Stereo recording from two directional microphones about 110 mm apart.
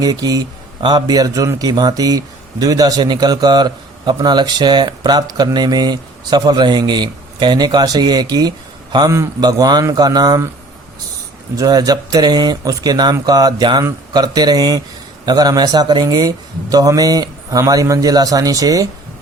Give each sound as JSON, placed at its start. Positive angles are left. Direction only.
{"t": 0.0, "sound": "a man's voice", "side_deg": -35}
{"t": 11.5, "sound": "a man's voice", "side_deg": -35}